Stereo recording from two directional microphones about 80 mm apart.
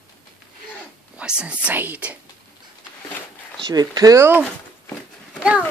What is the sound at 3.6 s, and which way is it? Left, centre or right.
Speech, right.